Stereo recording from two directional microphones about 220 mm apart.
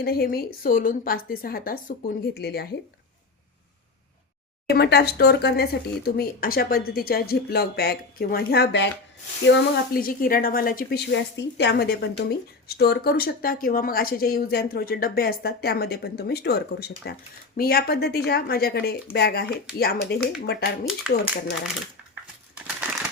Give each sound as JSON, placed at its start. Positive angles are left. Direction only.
{"t": 0.0, "sound": "a woman's voice", "side_deg": 45}
{"t": 4.7, "sound": "speech", "side_deg": 45}
{"t": 20.8, "sound": "speech", "side_deg": 0}
{"t": 22.1, "sound": "crumpling", "side_deg": -5}